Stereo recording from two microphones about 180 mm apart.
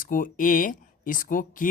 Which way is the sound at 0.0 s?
50° left (ahead or behind).